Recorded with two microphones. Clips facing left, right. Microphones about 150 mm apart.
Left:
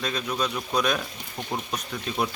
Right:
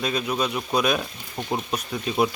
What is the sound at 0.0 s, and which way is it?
Speech, 10° right (ahead or behind).